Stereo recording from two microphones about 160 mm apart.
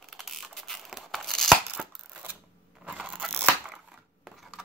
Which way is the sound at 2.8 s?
10° right (ahead or behind).